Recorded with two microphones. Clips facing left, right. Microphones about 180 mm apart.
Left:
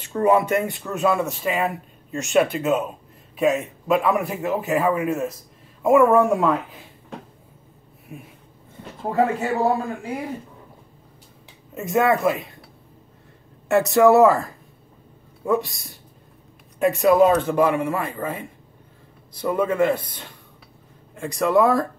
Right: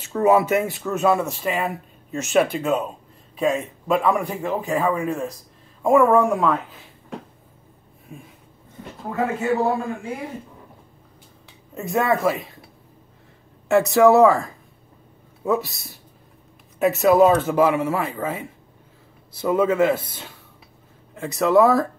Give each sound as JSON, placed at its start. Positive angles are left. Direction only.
{"t": 0.0, "sound": "speech", "side_deg": -5}
{"t": 9.0, "sound": "speech", "side_deg": 35}
{"t": 11.7, "sound": "speech", "side_deg": 0}
{"t": 13.7, "sound": "a man's voice", "side_deg": 0}